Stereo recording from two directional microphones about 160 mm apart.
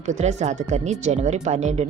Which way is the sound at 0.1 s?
45° right (ahead or behind).